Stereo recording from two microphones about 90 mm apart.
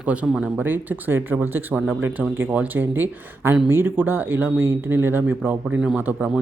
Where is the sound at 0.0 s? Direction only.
15° right (ahead or behind).